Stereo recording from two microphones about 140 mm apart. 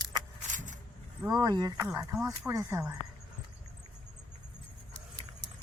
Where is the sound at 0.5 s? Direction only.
65° right (ahead or behind).